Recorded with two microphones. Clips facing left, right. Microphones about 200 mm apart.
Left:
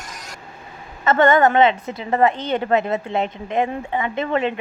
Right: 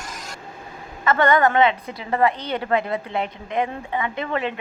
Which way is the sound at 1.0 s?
25° left (ahead or behind).